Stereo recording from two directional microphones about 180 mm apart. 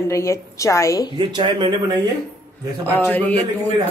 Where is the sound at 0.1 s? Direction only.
15° left (ahead or behind).